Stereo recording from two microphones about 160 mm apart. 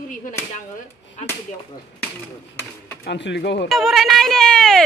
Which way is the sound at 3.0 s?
90° left.